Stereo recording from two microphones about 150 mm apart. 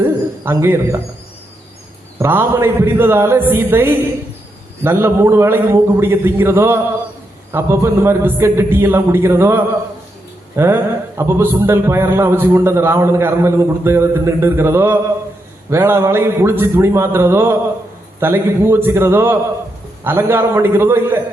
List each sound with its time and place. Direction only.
0.0 s bird: 15° right (ahead or behind)
2.1 s a man's voice: 15° right (ahead or behind)